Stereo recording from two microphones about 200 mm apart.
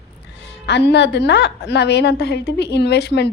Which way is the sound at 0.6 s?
60° left (ahead or behind).